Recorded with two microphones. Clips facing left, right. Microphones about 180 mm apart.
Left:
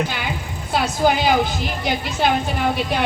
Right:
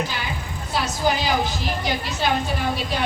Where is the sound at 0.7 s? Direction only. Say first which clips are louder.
Left 4 dB; 55° left (ahead or behind).